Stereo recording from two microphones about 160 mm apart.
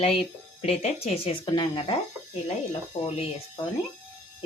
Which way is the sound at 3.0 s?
35° left (ahead or behind).